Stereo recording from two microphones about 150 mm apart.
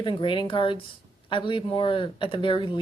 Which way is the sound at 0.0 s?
35° left (ahead or behind).